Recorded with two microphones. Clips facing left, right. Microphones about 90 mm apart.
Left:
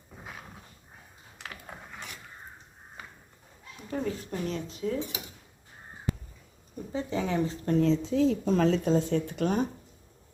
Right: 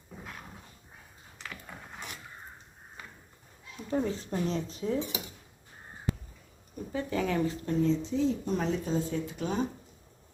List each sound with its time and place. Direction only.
3.8 s speech: 30° right (ahead or behind)
6.9 s speech: 25° left (ahead or behind)
7.6 s speech: 50° left (ahead or behind)
7.9 s speech: 90° left; by 9.6 s 55° left (ahead or behind)